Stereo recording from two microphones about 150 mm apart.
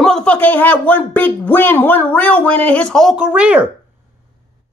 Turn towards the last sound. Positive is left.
turn(degrees=-10)  # may be behind; listen again after turning